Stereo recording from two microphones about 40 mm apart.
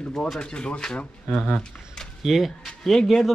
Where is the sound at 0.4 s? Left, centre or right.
Left.